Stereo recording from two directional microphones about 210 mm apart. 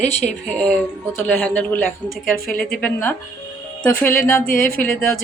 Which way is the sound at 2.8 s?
10° left (ahead or behind).